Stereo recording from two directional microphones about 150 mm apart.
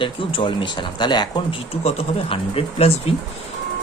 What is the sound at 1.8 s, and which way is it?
Speech, 40° left (ahead or behind).